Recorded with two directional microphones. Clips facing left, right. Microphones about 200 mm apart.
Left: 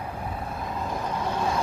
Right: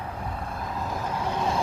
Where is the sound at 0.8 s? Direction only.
Centre (ahead or behind).